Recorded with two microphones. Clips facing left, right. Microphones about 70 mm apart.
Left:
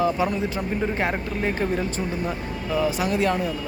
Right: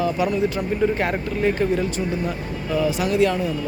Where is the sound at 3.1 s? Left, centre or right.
Left.